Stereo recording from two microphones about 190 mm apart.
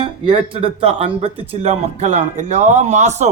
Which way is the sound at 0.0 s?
30° right (ahead or behind).